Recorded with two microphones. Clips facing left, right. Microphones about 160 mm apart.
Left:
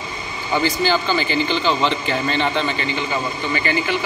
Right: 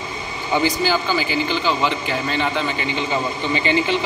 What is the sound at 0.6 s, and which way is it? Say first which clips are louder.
A man's voice: even; 10° right (ahead or behind).